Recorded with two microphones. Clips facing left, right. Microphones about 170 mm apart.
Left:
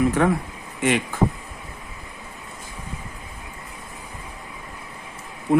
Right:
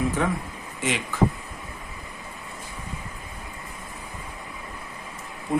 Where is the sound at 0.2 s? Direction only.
60° left (ahead or behind).